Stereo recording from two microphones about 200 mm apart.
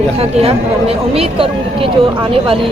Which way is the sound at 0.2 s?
30° right (ahead or behind).